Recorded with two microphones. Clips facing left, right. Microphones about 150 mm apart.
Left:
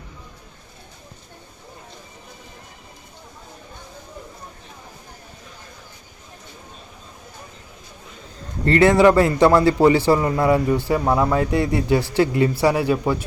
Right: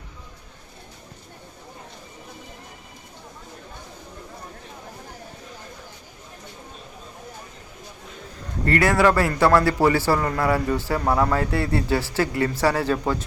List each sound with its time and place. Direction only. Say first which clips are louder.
8.6 s a man's voice: left 5 dB; 25° left (ahead or behind)